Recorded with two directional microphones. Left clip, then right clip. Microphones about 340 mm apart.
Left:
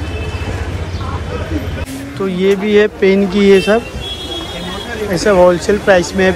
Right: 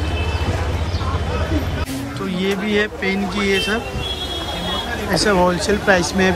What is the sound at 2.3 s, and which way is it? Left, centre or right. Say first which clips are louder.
Speech: left 9 dB; centre.